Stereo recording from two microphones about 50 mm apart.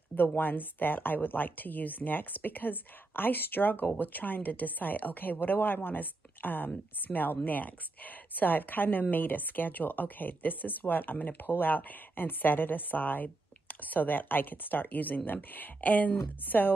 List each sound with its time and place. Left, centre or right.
0.1 s speech: left